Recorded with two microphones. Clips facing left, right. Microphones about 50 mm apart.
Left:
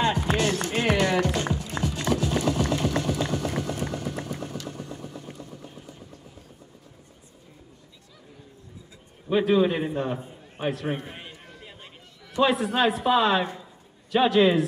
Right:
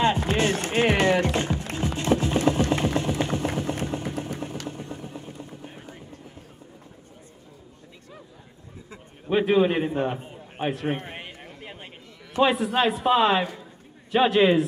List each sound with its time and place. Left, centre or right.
0.4 s music: right
3.8 s vehicle: right
9.3 s a man's voice: right
10.6 s a sound: right
12.4 s a woman's voice: right